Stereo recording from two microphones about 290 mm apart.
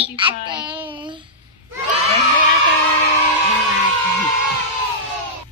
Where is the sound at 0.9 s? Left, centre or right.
Centre.